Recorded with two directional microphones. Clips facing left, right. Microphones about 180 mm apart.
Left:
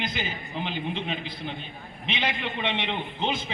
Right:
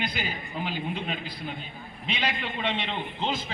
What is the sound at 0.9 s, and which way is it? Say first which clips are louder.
Speech: left 1 dB; 25° left (ahead or behind).